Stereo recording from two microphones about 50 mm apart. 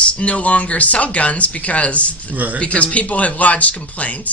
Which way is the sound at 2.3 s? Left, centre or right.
Right.